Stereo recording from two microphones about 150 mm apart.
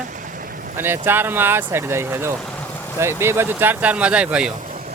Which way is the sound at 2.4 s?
10° left (ahead or behind).